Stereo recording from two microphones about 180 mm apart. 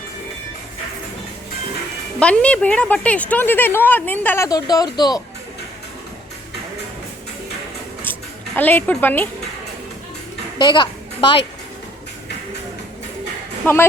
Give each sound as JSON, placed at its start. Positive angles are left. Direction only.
{"t": 2.1, "sound": "speech", "side_deg": 5}
{"t": 4.4, "sound": "speech", "side_deg": 20}
{"t": 8.1, "sound": "a sound", "side_deg": 10}
{"t": 8.5, "sound": "speech", "side_deg": 10}
{"t": 10.6, "sound": "a woman's voice", "side_deg": 25}
{"t": 13.6, "sound": "speech", "side_deg": 10}